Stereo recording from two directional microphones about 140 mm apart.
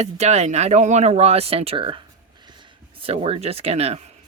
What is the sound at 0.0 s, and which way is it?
Speech, 50° right (ahead or behind).